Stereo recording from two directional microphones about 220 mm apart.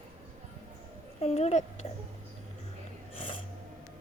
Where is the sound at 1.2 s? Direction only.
30° left (ahead or behind).